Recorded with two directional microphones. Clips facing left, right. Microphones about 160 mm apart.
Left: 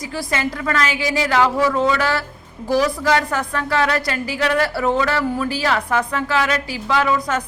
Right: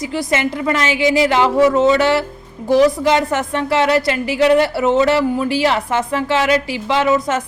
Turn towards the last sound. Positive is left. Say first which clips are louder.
# right 3 dB
turn(degrees=-25)  # may be behind; listen again after turning